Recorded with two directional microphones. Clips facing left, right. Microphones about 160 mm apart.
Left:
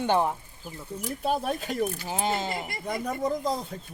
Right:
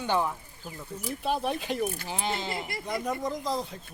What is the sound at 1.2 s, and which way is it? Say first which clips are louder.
Speech: left 1 dB; 45° left (ahead or behind).